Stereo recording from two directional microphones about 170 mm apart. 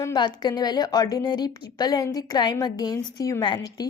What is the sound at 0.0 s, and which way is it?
A woman's voice, 25° left (ahead or behind).